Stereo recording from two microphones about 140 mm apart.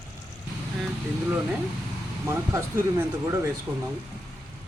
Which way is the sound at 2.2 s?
15° right (ahead or behind).